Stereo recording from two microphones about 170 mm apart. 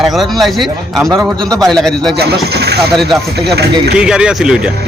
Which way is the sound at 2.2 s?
75° right (ahead or behind).